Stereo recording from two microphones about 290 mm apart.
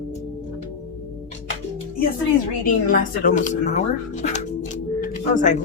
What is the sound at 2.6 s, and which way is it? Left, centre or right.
Speech, left.